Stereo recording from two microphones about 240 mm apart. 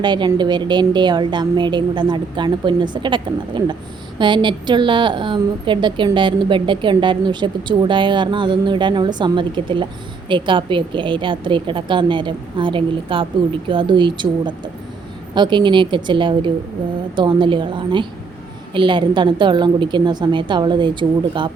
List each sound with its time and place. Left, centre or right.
0.0 s a woman's voice: centre